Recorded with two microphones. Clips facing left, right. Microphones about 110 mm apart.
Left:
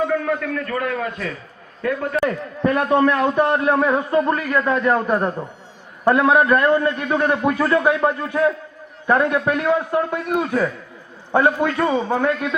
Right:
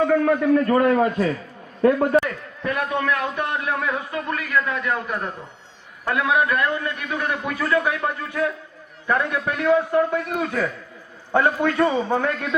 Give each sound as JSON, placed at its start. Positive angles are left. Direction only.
{"t": 0.1, "sound": "a man's voice", "side_deg": 0}
{"t": 0.3, "sound": "a man's voice", "side_deg": -20}
{"t": 2.2, "sound": "a man's voice", "side_deg": 40}